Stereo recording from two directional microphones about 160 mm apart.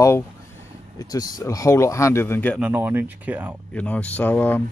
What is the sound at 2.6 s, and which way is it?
Speech, 10° right (ahead or behind).